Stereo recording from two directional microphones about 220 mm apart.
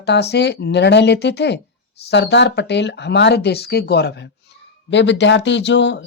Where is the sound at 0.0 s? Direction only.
50° left (ahead or behind).